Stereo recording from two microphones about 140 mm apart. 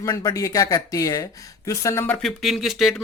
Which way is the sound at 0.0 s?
30° left (ahead or behind).